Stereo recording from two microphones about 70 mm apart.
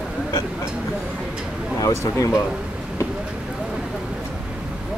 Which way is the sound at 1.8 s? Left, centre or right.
Left.